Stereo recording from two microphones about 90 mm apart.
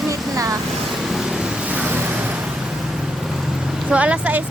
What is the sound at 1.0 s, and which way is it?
Vehicle, 5° right (ahead or behind).